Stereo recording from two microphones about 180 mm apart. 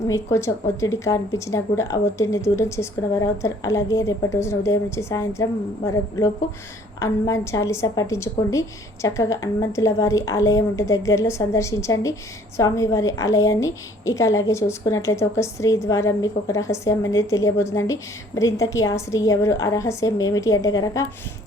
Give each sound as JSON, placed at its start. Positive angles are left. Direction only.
{"t": 0.1, "sound": "a woman's voice", "side_deg": 15}